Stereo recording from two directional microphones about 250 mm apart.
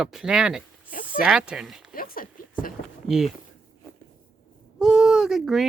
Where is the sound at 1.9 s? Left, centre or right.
Left.